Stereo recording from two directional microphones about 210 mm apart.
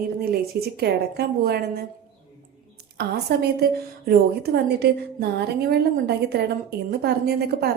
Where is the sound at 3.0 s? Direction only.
50° right (ahead or behind).